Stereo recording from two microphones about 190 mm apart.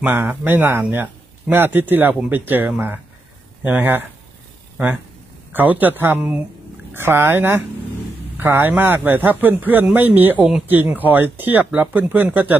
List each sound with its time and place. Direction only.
0.0 s speech: 10° right (ahead or behind)
5.5 s speech: 10° right (ahead or behind)